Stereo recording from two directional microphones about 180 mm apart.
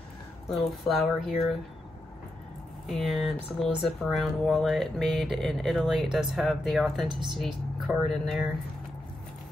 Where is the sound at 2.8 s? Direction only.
Centre (ahead or behind).